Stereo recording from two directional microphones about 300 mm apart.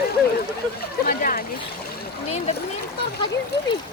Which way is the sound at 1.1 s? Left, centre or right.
Left.